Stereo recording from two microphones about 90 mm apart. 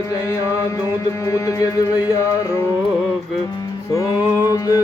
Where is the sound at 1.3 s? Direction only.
35° left (ahead or behind).